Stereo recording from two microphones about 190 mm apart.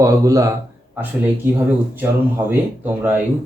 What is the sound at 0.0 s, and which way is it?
Speech, 15° right (ahead or behind).